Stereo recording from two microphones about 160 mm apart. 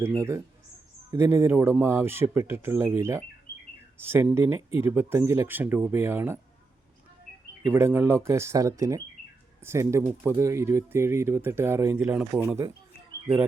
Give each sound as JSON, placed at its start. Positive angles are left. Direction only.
{"t": 0.2, "sound": "speech", "side_deg": -20}
{"t": 7.7, "sound": "speech", "side_deg": -15}
{"t": 12.1, "sound": "speech", "side_deg": -5}